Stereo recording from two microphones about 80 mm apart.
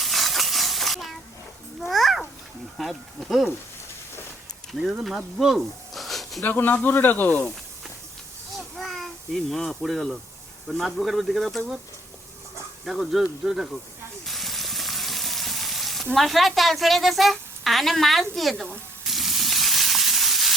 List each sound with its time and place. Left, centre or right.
0.0 s a sound: centre
1.9 s babbling: centre
2.7 s speech: centre
4.8 s speech: centre
6.4 s speech: left
8.5 s a sound: centre
10.7 s speech: centre
12.8 s speech: centre
14.3 s frying: centre
16.1 s a sound: centre